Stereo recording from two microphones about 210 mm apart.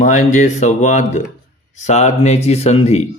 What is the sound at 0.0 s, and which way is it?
Speech, 35° left (ahead or behind).